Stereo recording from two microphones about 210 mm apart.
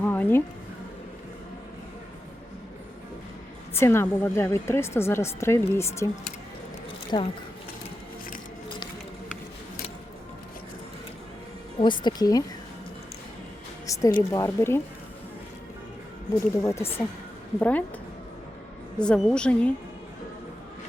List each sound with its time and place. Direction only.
0.0 s music: 10° left (ahead or behind)
3.8 s speech: 10° left (ahead or behind)
7.1 s speech: 20° left (ahead or behind)
11.8 s speech: 20° left (ahead or behind)
13.8 s music: 15° left (ahead or behind)
14.2 s speech: 15° left (ahead or behind)
16.6 s speech: 10° left (ahead or behind)
18.9 s a woman's voice: 5° left (ahead or behind)